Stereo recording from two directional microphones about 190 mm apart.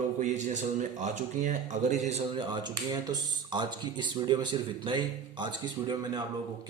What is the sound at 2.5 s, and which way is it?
Speech, 20° right (ahead or behind).